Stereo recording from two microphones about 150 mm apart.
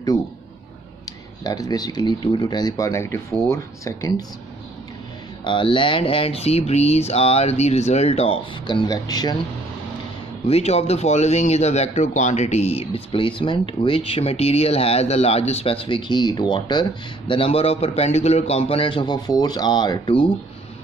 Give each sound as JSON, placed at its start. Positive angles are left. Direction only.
{"t": 1.0, "sound": "speech", "side_deg": 25}
{"t": 5.4, "sound": "speech", "side_deg": 35}
{"t": 8.6, "sound": "speech", "side_deg": 30}
{"t": 10.5, "sound": "a man's voice", "side_deg": 45}